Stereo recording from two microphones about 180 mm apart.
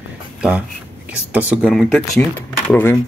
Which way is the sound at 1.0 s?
5° right (ahead or behind).